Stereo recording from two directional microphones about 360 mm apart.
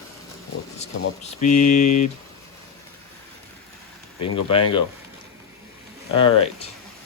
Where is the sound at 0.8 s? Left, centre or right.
Centre.